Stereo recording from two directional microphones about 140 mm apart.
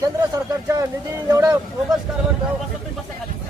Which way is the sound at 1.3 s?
20° right (ahead or behind).